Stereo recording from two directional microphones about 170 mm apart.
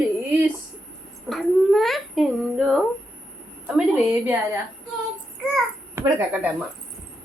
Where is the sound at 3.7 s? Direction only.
10° right (ahead or behind).